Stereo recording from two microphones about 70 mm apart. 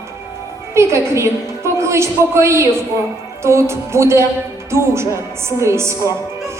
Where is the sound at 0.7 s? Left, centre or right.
Right.